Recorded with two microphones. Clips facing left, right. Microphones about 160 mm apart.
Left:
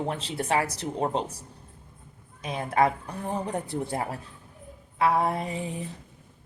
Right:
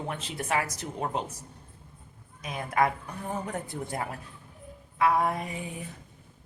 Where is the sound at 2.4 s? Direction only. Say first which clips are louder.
Left 3 dB; 30° left (ahead or behind).